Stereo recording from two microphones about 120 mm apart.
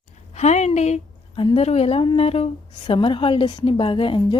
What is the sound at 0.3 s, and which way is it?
Speech, 70° left (ahead or behind).